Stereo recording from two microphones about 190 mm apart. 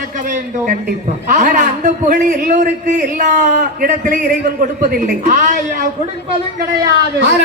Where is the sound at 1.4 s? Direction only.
40° right (ahead or behind).